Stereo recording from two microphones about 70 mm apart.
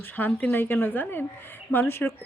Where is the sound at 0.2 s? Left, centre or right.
Left.